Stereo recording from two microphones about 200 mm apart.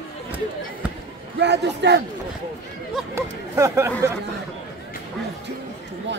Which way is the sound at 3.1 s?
15° right (ahead or behind).